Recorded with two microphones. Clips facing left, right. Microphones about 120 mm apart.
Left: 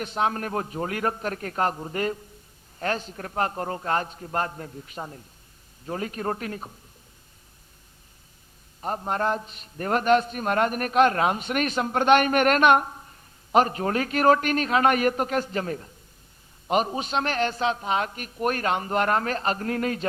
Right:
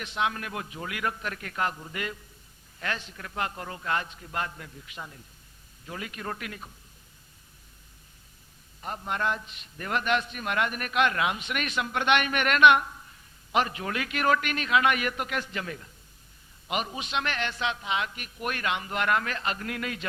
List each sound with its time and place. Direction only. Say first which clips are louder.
0.0 s a man's voice: left 4 dB; 40° left (ahead or behind)
8.8 s a man's voice: left 5 dB; 40° left (ahead or behind)